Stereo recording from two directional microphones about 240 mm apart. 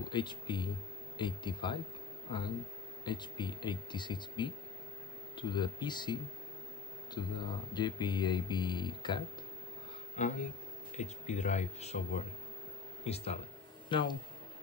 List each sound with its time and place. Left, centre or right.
0.1 s speech: centre
3.1 s speech: centre
7.2 s speech: centre
10.2 s speech: left